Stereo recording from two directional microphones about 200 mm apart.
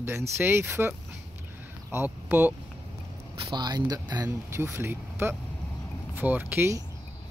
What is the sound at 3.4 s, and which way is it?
Speech, 20° right (ahead or behind).